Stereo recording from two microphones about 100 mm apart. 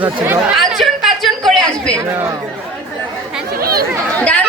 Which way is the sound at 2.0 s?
30° right (ahead or behind).